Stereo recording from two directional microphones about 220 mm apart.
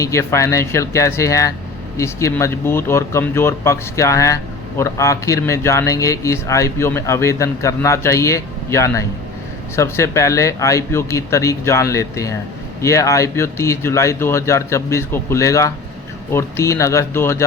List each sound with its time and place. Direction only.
0.0 s speech: 15° left (ahead or behind)